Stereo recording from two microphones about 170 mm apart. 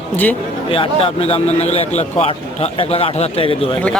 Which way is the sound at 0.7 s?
35° left (ahead or behind).